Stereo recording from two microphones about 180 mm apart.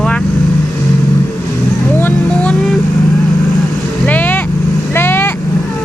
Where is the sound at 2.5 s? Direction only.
Centre (ahead or behind).